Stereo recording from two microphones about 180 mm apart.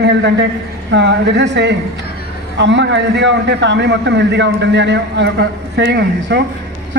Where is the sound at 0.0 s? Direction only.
70° right (ahead or behind).